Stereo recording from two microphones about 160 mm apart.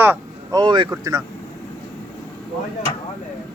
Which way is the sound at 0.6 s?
30° right (ahead or behind).